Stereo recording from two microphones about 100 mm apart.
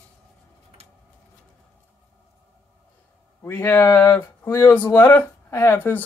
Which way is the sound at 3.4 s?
25° left (ahead or behind).